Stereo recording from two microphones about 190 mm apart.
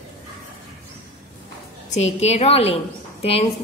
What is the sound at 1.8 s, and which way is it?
Speech, 35° left (ahead or behind).